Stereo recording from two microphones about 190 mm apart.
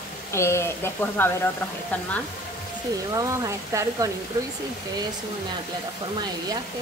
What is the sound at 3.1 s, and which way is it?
Speech, 15° right (ahead or behind).